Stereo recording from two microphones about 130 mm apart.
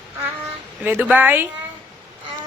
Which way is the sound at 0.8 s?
15° right (ahead or behind).